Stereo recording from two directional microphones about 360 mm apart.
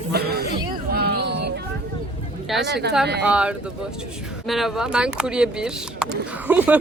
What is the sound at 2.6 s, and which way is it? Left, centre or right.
Speech, right.